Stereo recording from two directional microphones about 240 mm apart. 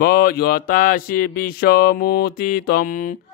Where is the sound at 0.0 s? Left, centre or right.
Left.